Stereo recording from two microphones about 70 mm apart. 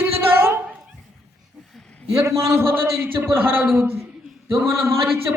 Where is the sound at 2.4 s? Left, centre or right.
Right.